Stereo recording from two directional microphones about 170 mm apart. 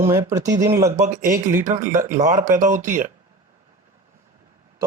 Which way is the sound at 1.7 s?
50° right (ahead or behind).